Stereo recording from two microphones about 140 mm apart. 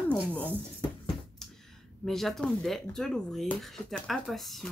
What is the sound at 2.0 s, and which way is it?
Speech, centre (ahead or behind).